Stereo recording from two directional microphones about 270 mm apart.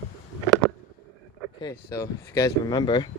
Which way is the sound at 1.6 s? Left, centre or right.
Centre.